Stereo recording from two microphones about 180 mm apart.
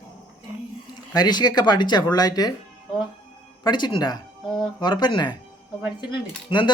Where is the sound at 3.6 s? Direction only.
25° left (ahead or behind).